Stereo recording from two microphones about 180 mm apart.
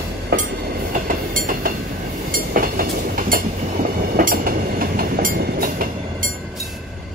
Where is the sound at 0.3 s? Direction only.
60° right (ahead or behind).